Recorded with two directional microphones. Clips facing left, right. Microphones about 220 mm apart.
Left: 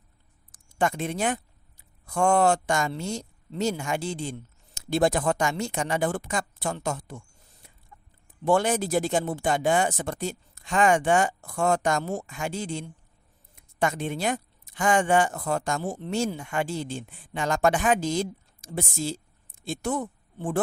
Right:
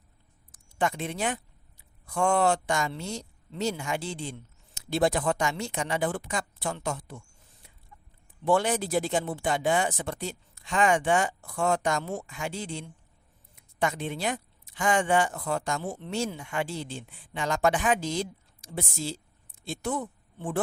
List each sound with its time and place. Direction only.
0.5 s speech: 45° left (ahead or behind)
7.9 s chicken: 50° left (ahead or behind)
8.4 s speech: 45° left (ahead or behind)